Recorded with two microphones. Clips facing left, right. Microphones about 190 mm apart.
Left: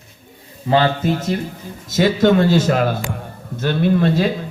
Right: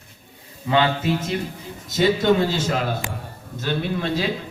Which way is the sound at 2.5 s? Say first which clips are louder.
Left 7 dB; 50° left (ahead or behind).